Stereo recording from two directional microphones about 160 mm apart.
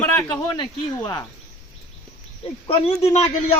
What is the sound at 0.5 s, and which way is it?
Speech, 30° left (ahead or behind).